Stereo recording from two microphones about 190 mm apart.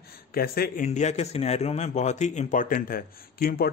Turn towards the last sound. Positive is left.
turn(degrees=50)  # may be behind; listen again after turning